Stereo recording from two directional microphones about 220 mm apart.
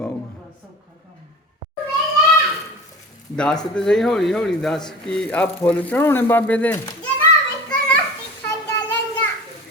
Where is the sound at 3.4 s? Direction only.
5° left (ahead or behind).